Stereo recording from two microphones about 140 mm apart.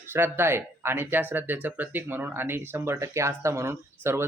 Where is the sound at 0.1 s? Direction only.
15° right (ahead or behind).